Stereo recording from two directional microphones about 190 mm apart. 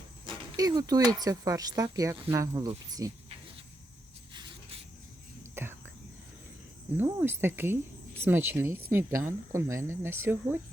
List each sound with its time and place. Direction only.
0.3 s speech: 20° right (ahead or behind)
4.4 s a sound: 25° right (ahead or behind)
5.6 s whispering: 10° right (ahead or behind)
6.9 s speech: 10° right (ahead or behind)